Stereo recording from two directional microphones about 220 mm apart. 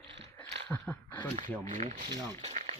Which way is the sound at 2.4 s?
30° right (ahead or behind).